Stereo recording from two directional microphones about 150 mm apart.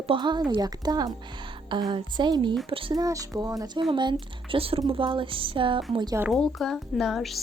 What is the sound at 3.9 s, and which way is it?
Music, 30° right (ahead or behind).